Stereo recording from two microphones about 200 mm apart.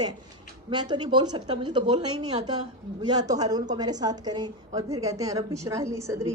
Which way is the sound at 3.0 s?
20° right (ahead or behind).